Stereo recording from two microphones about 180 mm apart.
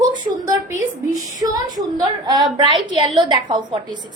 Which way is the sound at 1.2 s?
20° right (ahead or behind).